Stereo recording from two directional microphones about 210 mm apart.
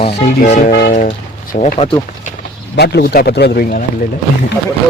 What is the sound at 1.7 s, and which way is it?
Speech, 25° left (ahead or behind).